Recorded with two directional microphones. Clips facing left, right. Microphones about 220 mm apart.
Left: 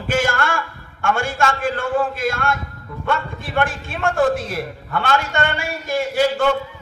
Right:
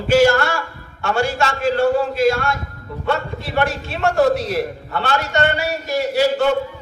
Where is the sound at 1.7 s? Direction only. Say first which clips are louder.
Right 7 dB; 35° right (ahead or behind).